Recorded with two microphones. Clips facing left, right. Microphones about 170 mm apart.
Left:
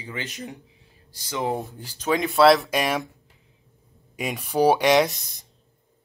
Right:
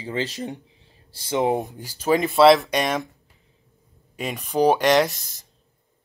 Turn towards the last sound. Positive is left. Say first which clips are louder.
# even
turn(degrees=10)  # may be behind; listen again after turning